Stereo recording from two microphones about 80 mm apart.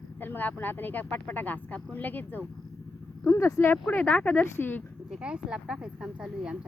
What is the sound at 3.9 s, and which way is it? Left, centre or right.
Speech, centre.